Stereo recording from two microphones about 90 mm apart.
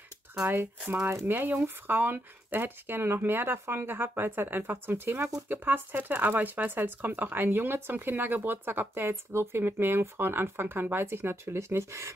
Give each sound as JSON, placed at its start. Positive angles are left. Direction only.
{"t": 0.3, "sound": "speech", "side_deg": -25}